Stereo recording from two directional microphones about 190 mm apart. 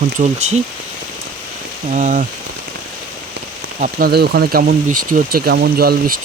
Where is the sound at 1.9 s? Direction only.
40° right (ahead or behind).